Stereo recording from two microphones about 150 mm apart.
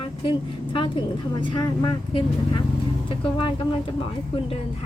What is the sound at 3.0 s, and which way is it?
Speech, 35° left (ahead or behind).